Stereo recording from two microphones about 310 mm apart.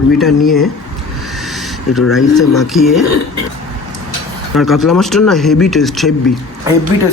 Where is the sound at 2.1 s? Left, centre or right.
Centre.